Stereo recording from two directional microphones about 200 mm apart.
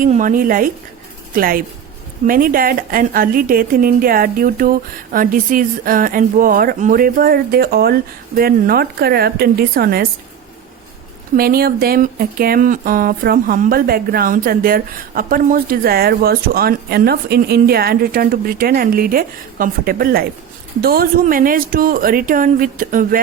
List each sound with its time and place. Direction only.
0.0 s speech: 40° right (ahead or behind)
11.3 s speech: 50° right (ahead or behind)